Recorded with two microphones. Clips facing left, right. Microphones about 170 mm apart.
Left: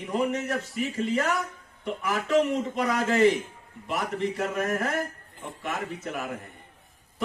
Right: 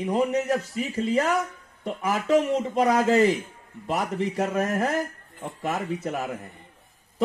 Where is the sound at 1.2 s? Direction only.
40° right (ahead or behind).